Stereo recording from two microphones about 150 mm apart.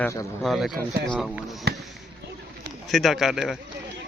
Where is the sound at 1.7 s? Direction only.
90° right.